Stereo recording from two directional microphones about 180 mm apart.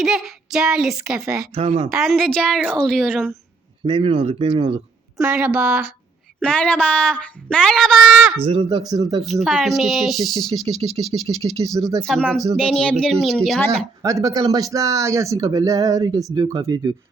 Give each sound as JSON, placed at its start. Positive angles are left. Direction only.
{"t": 0.0, "sound": "speech", "side_deg": 0}
{"t": 1.5, "sound": "speech", "side_deg": -30}
{"t": 2.0, "sound": "speech", "side_deg": 0}
{"t": 3.8, "sound": "speech", "side_deg": -25}
{"t": 5.1, "sound": "speech", "side_deg": -5}
{"t": 6.4, "sound": "speech", "side_deg": 5}
{"t": 8.4, "sound": "speech", "side_deg": -30}
{"t": 9.2, "sound": "speech", "side_deg": 0}
{"t": 11.8, "sound": "speech", "side_deg": -20}
{"t": 12.0, "sound": "speech", "side_deg": 5}
{"t": 14.0, "sound": "speech", "side_deg": -15}